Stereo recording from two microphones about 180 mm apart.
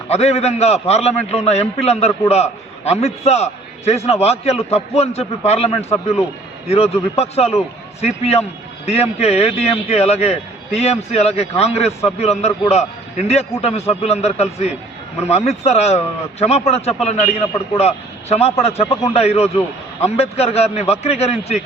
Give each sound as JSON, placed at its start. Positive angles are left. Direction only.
{"t": 0.1, "sound": "a man's voice", "side_deg": 35}